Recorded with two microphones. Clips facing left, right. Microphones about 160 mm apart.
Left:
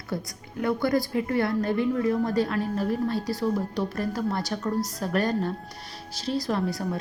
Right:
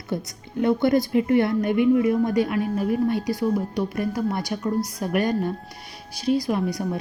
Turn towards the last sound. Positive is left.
turn(degrees=-15)  # may be behind; listen again after turning